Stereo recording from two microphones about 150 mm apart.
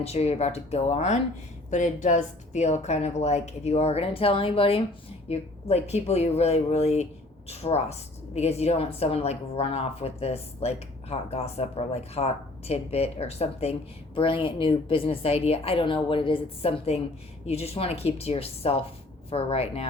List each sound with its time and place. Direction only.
0.0 s a woman's voice: 45° left (ahead or behind)